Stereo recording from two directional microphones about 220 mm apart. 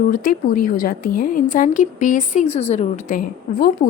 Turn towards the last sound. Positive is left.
turn(degrees=40)  # may be behind; listen again after turning